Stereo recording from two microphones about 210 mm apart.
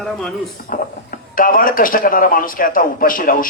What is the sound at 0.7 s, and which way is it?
Speech, 40° left (ahead or behind).